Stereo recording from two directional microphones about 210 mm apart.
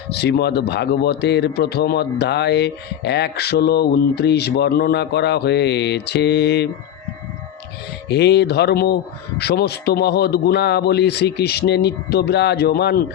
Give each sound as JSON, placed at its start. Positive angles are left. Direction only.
{"t": 0.1, "sound": "speech", "side_deg": 50}
{"t": 8.0, "sound": "speech", "side_deg": 55}